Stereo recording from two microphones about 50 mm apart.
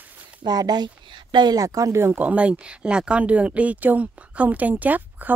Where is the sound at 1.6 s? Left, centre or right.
Right.